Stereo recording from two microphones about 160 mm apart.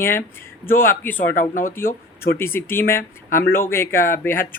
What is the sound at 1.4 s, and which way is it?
Speech, 55° left (ahead or behind).